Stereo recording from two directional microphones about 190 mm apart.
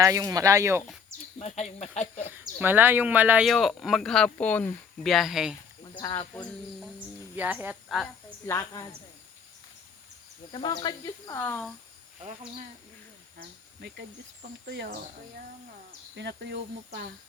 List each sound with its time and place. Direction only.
0.0 s speech: 15° right (ahead or behind)
1.4 s speech: 35° left (ahead or behind)
2.3 s speech: 10° right (ahead or behind)
8.4 s speech: 20° left (ahead or behind)
10.5 s speech: 25° left (ahead or behind)
13.4 s speech: 60° right (ahead or behind)
16.1 s speech: 65° right (ahead or behind)